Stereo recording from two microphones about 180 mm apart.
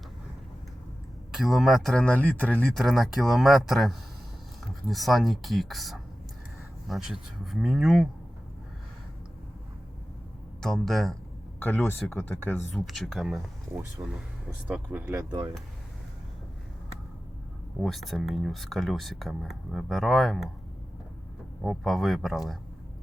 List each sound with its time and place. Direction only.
1.3 s speech: centre (ahead or behind)
10.6 s speech: centre (ahead or behind)
11.6 s speech: 10° left (ahead or behind)
12.7 s speech: centre (ahead or behind)
15.3 s speech: 25° right (ahead or behind)
17.7 s speech: centre (ahead or behind)
21.6 s speech: centre (ahead or behind)